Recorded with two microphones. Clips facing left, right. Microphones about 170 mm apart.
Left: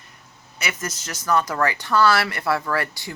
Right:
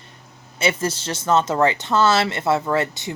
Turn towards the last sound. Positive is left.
turn(degrees=-20)  # may be behind; listen again after turning